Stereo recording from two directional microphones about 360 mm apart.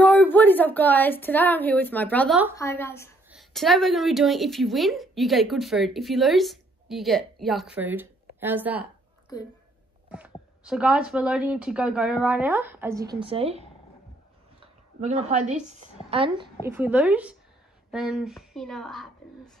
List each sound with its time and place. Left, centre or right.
0.0 s a woman's voice: centre
10.1 s a woman's voice: centre
15.0 s a woman's voice: centre